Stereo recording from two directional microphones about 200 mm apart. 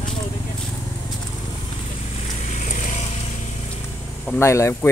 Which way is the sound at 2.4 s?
35° left (ahead or behind).